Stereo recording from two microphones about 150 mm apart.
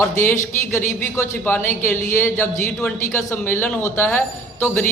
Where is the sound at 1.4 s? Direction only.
15° left (ahead or behind).